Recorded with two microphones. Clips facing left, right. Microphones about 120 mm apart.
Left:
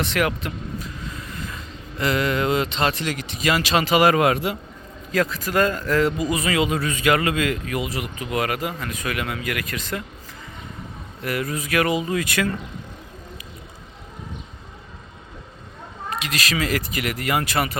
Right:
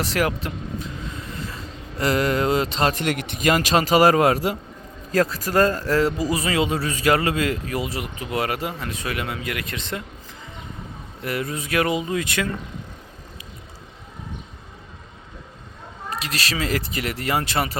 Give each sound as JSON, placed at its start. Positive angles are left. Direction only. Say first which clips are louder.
{"t": 0.0, "sound": "vehicle", "louder": "even", "side_deg": -35}
{"t": 3.0, "sound": "a man's voice", "louder": "right 3 dB", "side_deg": -60}
{"t": 11.2, "sound": "speech", "louder": "left 1 dB", "side_deg": -25}
{"t": 16.0, "sound": "speech", "louder": "left 1 dB", "side_deg": -35}